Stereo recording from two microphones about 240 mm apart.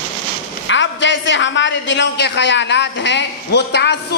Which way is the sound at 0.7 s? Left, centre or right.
Left.